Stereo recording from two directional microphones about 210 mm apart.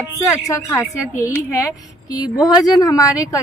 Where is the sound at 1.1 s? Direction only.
15° left (ahead or behind).